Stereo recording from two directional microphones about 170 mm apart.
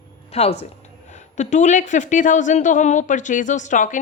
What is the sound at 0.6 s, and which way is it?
Speech, 45° left (ahead or behind).